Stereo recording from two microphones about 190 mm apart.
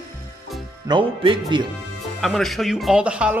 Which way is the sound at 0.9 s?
25° right (ahead or behind).